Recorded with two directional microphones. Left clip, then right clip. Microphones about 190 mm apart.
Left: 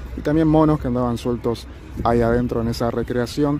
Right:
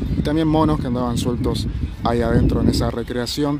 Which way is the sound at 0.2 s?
5° left (ahead or behind).